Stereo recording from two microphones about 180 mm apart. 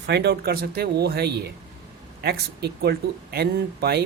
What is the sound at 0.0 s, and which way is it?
Speech, 65° right (ahead or behind).